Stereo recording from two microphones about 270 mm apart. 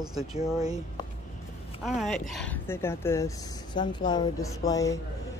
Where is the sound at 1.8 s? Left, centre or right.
Centre.